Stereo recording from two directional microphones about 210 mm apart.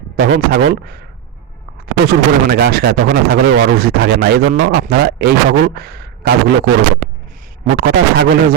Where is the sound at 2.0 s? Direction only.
45° right (ahead or behind).